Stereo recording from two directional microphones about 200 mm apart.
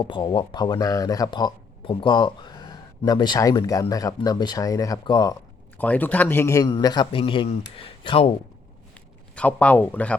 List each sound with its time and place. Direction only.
0.0 s speech: 20° left (ahead or behind)
5.7 s speech: 10° left (ahead or behind); by 8.3 s 25° left (ahead or behind)
9.3 s speech: 5° left (ahead or behind)